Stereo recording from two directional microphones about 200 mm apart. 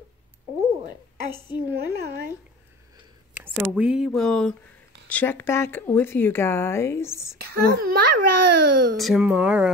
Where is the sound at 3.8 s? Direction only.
5° right (ahead or behind); by 7.4 s 15° left (ahead or behind).